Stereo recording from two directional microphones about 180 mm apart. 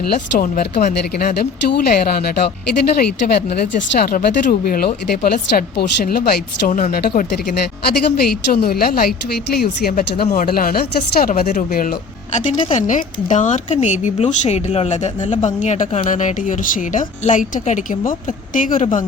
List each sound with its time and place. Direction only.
0.1 s speech: 50° left (ahead or behind)
1.1 s speech: 60° left (ahead or behind)
3.3 s speech: 65° left (ahead or behind); by 18.9 s 45° left (ahead or behind)